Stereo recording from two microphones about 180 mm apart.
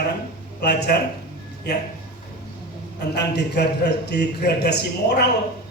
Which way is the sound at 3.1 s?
65° left (ahead or behind).